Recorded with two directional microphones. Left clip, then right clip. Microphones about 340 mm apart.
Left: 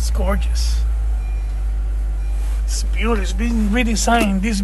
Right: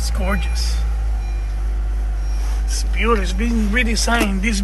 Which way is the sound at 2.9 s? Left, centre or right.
Centre.